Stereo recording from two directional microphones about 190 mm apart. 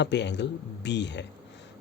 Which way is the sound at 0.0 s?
65° left (ahead or behind).